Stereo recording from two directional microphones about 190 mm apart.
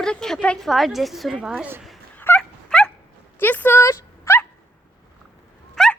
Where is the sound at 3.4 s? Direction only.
10° left (ahead or behind).